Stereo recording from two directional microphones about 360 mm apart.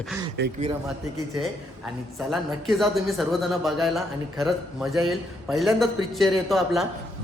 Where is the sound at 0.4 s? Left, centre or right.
Right.